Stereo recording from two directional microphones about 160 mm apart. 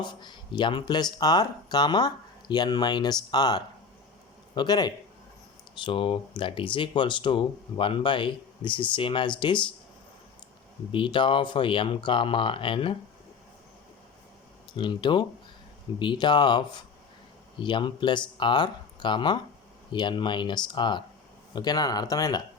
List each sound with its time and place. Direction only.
0.0 s speech: 30° left (ahead or behind)
10.9 s speech: 30° left (ahead or behind)
14.7 s speech: 30° left (ahead or behind)